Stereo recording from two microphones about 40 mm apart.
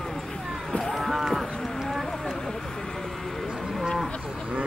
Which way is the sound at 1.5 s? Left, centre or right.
Centre.